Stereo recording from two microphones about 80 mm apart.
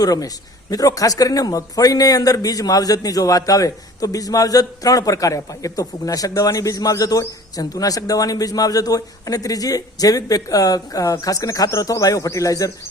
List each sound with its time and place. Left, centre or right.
0.0 s speech: left